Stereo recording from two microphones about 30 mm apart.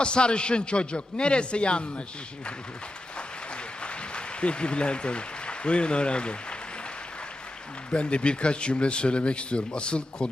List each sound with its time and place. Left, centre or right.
0.0 s speech: left
3.8 s speech: left
7.9 s speech: left